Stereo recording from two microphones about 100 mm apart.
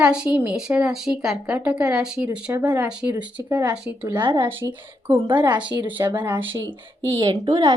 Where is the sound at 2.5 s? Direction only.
30° right (ahead or behind).